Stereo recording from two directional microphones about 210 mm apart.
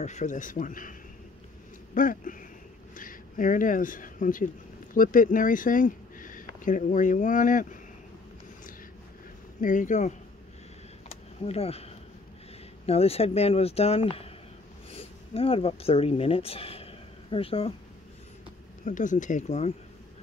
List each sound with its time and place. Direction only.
0.0 s speech: 35° left (ahead or behind)
2.0 s speech: 40° left (ahead or behind)
9.6 s speech: 35° left (ahead or behind)
11.1 s a sound: 30° left (ahead or behind)
12.8 s speech: 30° left (ahead or behind)
18.9 s speech: 35° left (ahead or behind)